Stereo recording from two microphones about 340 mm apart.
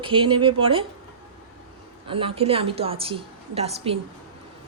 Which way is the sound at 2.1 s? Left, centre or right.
Centre.